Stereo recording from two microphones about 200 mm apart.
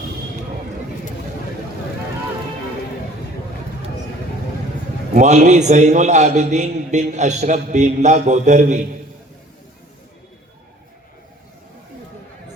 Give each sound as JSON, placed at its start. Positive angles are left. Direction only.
{"t": 5.1, "sound": "a man's voice", "side_deg": -35}